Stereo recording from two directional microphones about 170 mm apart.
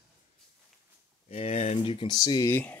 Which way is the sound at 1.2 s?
35° left (ahead or behind).